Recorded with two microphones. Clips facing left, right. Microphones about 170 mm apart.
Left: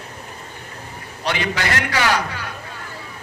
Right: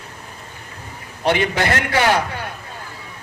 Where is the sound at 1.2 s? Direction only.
50° right (ahead or behind).